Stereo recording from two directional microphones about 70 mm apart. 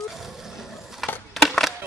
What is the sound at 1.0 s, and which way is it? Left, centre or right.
Crushing, centre.